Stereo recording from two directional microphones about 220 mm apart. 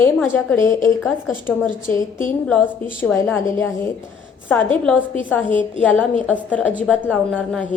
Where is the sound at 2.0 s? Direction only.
35° left (ahead or behind).